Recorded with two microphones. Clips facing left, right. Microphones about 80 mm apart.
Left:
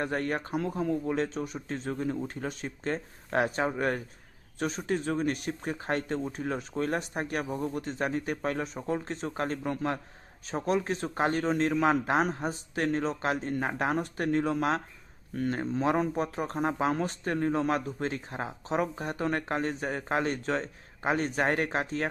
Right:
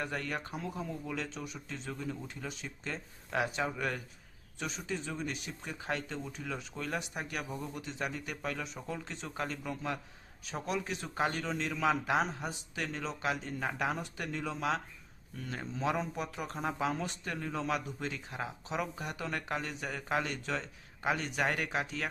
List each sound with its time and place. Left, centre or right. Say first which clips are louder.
0.0 s speech: left 7 dB; left